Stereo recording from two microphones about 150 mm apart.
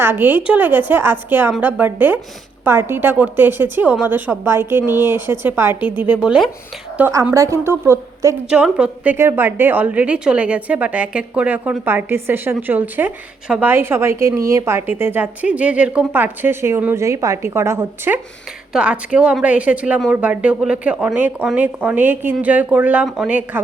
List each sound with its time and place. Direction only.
0.0 s a woman's voice: 15° right (ahead or behind)
8.4 s a woman's voice: 5° right (ahead or behind)